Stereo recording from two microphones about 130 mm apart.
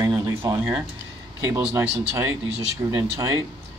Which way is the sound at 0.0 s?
25° right (ahead or behind).